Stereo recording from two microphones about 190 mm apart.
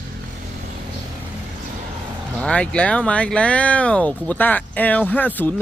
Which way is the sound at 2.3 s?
5° left (ahead or behind).